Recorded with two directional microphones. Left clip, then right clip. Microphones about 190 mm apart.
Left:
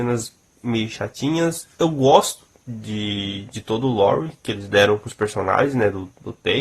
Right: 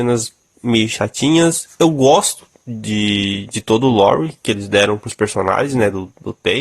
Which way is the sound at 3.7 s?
40° right (ahead or behind).